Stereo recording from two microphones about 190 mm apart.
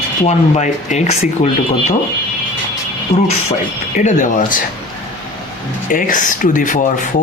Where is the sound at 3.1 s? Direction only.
30° left (ahead or behind).